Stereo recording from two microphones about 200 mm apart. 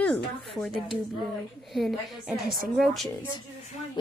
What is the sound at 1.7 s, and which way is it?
Speech, centre (ahead or behind).